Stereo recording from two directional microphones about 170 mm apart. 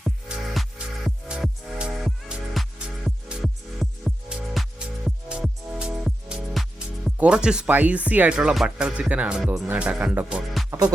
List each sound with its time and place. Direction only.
0.5 s music: centre (ahead or behind)
6.1 s speech: 5° right (ahead or behind)
10.7 s music: 25° right (ahead or behind)